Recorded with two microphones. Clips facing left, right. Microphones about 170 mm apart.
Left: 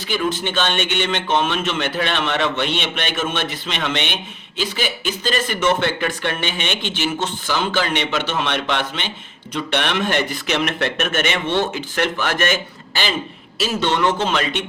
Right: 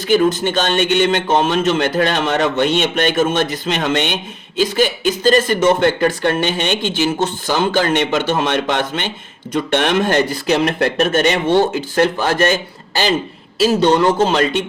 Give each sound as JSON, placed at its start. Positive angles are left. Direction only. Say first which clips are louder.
{"t": 0.1, "sound": "speech", "louder": "right 8 dB", "side_deg": -40}